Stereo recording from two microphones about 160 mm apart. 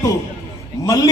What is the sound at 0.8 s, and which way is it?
Speech, 20° left (ahead or behind).